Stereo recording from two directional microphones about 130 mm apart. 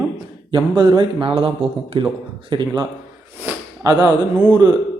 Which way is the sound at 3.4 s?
30° right (ahead or behind).